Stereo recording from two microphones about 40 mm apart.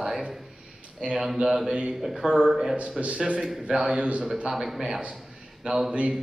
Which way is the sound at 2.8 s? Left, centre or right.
Right.